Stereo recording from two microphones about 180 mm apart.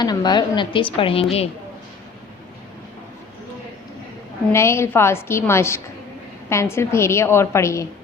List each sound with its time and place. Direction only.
0.0 s a woman's voice: 25° left (ahead or behind)
4.5 s a woman's voice: 15° left (ahead or behind)